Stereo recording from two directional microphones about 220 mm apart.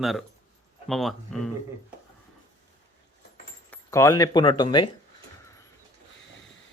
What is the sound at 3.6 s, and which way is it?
Speech, 15° left (ahead or behind).